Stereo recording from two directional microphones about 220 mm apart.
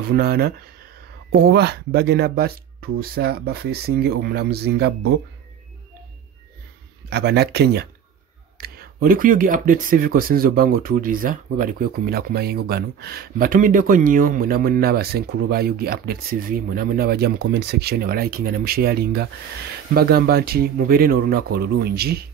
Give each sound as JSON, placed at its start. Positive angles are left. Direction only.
{"t": 0.1, "sound": "speech", "side_deg": -45}
{"t": 7.1, "sound": "speech", "side_deg": -45}